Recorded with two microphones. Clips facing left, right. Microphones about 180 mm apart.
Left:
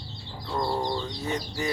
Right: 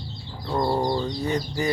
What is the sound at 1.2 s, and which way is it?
Speech, 5° left (ahead or behind).